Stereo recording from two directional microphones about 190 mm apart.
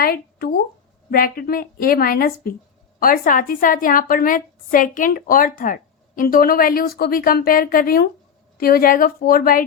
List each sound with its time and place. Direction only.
0.0 s a woman's voice: 50° left (ahead or behind)